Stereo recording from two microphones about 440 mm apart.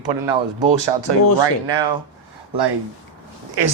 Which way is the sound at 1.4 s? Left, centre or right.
Right.